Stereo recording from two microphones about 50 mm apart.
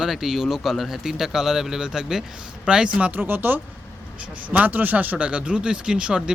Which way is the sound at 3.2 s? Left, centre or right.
Right.